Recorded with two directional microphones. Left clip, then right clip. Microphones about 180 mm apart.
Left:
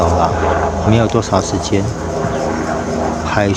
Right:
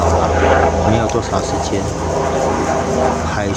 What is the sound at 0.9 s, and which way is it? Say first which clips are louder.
Speech: left 2 dB; 40° left (ahead or behind).